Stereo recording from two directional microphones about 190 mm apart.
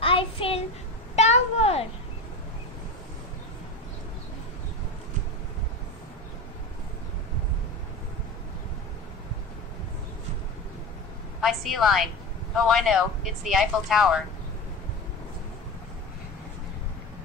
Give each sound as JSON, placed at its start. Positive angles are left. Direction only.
{"t": 0.0, "sound": "child singing", "side_deg": 30}
{"t": 1.1, "sound": "a sound", "side_deg": 35}
{"t": 11.4, "sound": "speech", "side_deg": 0}